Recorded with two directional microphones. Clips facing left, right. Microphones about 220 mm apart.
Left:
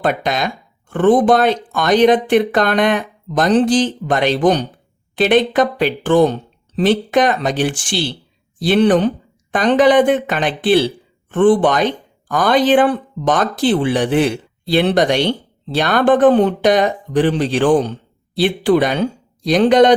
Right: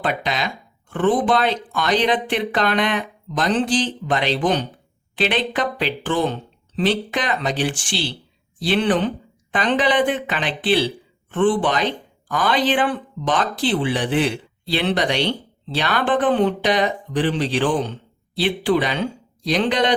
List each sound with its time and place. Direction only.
0.0 s speech: 50° left (ahead or behind)